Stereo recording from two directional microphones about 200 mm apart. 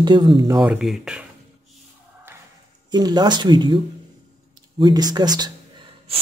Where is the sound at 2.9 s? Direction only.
20° right (ahead or behind).